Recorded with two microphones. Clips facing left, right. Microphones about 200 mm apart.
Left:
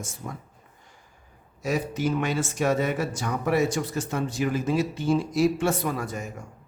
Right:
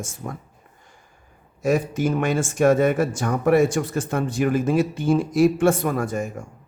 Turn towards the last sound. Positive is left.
turn(degrees=-50)  # may be behind; listen again after turning